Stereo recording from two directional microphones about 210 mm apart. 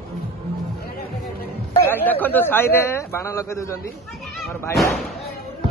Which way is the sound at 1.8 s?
10° left (ahead or behind).